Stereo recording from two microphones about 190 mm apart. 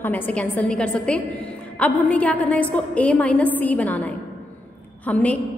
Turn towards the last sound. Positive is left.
turn(degrees=5)  # may be behind; listen again after turning